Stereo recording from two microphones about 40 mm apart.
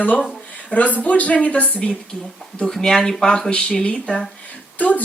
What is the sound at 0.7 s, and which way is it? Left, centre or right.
Speech, left.